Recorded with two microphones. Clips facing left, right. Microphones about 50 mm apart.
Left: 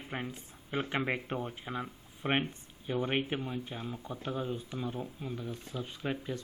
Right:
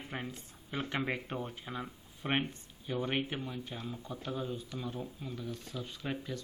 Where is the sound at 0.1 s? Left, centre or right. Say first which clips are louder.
Left 4 dB; centre.